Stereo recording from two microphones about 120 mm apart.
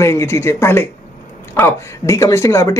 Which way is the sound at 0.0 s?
25° left (ahead or behind).